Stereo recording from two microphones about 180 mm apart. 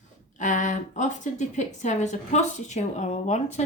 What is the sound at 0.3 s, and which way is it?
Speech, 45° left (ahead or behind).